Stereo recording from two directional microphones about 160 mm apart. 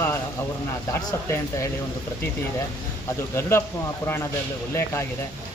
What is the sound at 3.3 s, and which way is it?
Speech, 15° left (ahead or behind).